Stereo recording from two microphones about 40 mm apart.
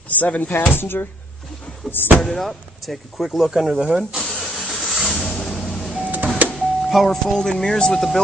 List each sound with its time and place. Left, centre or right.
0.2 s speech: left
0.7 s speech: left
2.2 s speech: centre
4.4 s vehicle: centre
5.1 s a sound: left
5.4 s a sound: centre
5.7 s power windows: centre
6.1 s a sound: right
6.5 s doorbell: centre
7.1 s speech: centre